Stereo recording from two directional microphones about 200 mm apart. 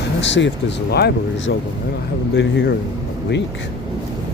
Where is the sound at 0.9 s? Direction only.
55° left (ahead or behind).